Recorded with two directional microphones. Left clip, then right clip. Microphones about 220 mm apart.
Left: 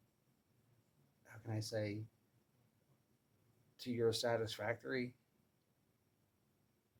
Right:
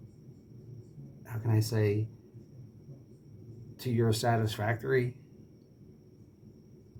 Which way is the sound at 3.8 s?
35° left (ahead or behind).